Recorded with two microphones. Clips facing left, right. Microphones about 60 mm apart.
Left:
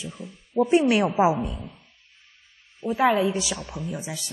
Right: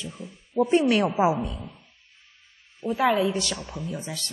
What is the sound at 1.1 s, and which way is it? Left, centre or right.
Speech, left.